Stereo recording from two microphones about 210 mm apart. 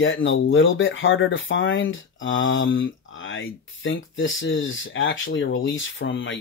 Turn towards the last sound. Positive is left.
turn(degrees=65)  # may be behind; listen again after turning